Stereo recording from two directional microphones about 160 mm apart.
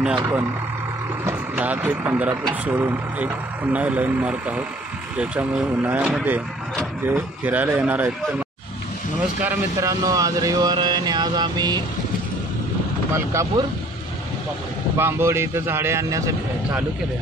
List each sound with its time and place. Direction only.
0.0 s speech: 5° right (ahead or behind); by 11.8 s 25° right (ahead or behind)
13.6 s speech: 25° right (ahead or behind)
15.0 s speech: 15° right (ahead or behind)